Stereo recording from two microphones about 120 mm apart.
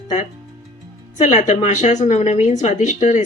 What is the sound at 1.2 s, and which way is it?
A woman's voice, 90° left.